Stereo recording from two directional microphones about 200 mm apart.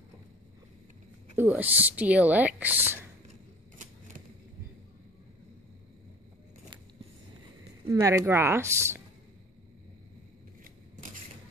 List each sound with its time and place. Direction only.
1.3 s speech: 10° right (ahead or behind)
3.7 s typewriter: 40° right (ahead or behind)
7.8 s speech: 15° right (ahead or behind)